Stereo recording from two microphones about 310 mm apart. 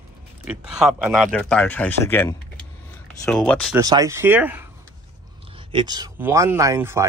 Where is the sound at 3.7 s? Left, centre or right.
Centre.